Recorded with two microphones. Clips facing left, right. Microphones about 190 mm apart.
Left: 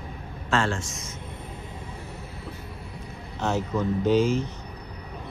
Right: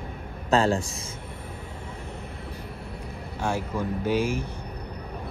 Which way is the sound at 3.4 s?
10° right (ahead or behind).